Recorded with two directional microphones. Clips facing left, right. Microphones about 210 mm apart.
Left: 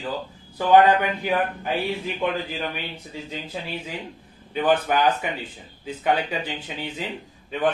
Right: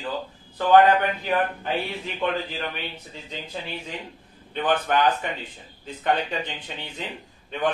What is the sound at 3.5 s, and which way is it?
A man's voice, 5° left (ahead or behind).